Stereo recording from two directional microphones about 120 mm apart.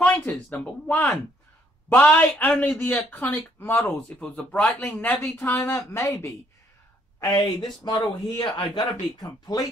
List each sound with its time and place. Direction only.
0.0 s speech: 5° left (ahead or behind); by 6.3 s 25° left (ahead or behind)
7.3 s speech: 35° left (ahead or behind)